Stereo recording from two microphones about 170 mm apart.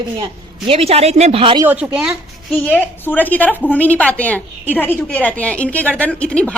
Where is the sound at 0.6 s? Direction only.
35° right (ahead or behind).